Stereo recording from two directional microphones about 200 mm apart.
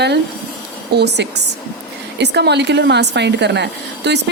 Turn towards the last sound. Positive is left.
turn(degrees=-60)  # may be behind; listen again after turning